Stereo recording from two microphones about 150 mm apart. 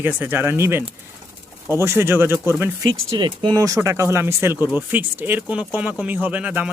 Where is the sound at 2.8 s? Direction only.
30° right (ahead or behind).